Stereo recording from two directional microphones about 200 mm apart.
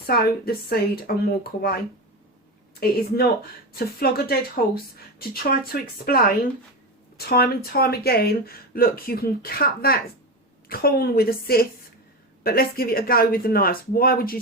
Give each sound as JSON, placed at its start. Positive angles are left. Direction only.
{"t": 0.1, "sound": "speech", "side_deg": 50}
{"t": 3.7, "sound": "speech", "side_deg": 50}